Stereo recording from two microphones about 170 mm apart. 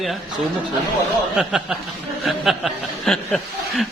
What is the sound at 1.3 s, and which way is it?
A man's voice, 5° right (ahead or behind).